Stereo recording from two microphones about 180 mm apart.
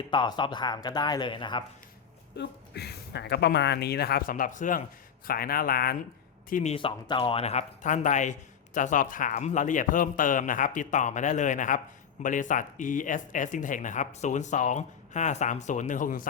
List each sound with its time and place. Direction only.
0.1 s speech: 25° left (ahead or behind)
2.3 s speech: 65° left (ahead or behind)
6.5 s speech: 40° left (ahead or behind)